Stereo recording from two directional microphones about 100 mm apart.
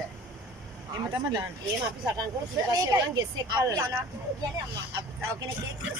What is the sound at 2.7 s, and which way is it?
Speech, 40° right (ahead or behind).